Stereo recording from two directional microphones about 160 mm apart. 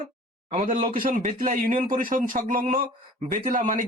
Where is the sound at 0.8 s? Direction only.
55° right (ahead or behind).